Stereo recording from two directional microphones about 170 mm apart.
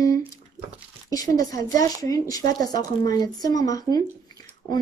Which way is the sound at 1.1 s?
20° left (ahead or behind).